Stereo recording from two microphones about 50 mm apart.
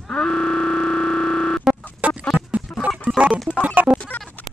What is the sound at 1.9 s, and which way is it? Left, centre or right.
Music, right.